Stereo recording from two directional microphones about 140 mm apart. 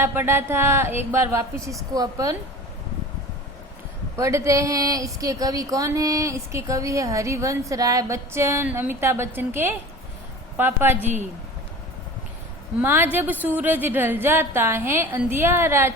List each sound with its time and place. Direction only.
0.0 s a woman's voice: 15° right (ahead or behind)
4.2 s a woman's voice: 20° right (ahead or behind)
12.8 s a woman's voice: 15° right (ahead or behind)